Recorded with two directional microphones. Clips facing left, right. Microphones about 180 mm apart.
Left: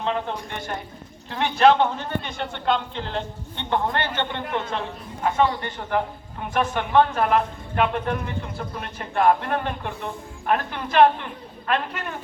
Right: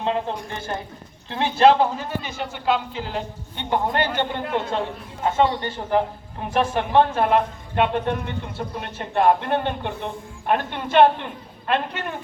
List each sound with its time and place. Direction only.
0.0 s a man's voice: 25° right (ahead or behind)
1.8 s a man's voice: 5° right (ahead or behind)
5.2 s a man's voice: 30° right (ahead or behind)